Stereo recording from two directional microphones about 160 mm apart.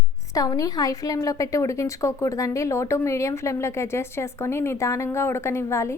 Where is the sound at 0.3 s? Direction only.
20° left (ahead or behind).